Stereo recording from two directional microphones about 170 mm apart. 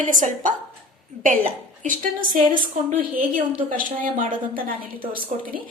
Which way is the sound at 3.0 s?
55° right (ahead or behind).